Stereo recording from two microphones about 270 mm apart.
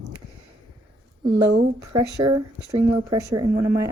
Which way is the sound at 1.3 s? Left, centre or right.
Right.